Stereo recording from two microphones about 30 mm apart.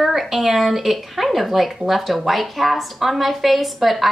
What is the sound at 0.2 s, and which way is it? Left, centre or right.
A woman's voice, centre.